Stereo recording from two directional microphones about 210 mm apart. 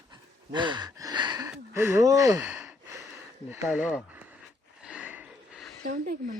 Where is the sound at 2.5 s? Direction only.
5° right (ahead or behind).